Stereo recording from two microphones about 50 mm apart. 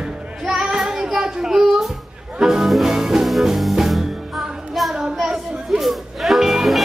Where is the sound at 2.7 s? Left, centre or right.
Centre.